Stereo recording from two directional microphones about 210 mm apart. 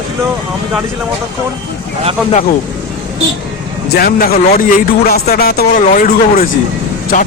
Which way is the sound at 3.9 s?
45° left (ahead or behind).